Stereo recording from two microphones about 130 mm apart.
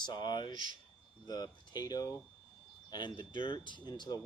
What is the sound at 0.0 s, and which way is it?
Speech, 35° left (ahead or behind).